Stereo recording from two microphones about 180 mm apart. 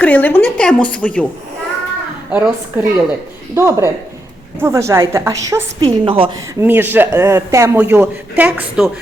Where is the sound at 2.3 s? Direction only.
10° right (ahead or behind).